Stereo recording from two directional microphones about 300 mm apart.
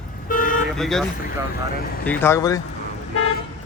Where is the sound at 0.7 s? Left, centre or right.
Centre.